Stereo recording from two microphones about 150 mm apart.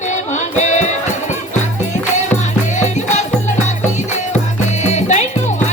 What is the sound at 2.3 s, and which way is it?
Music, 50° left (ahead or behind).